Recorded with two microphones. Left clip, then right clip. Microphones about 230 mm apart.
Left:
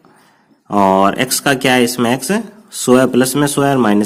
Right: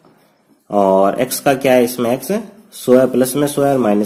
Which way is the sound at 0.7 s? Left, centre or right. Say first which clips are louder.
Left 1 dB; left.